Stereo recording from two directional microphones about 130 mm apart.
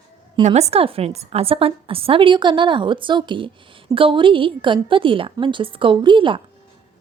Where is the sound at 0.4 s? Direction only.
55° right (ahead or behind).